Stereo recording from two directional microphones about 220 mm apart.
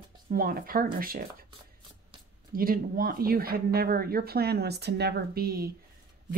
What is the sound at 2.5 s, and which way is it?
A woman's voice, 40° right (ahead or behind).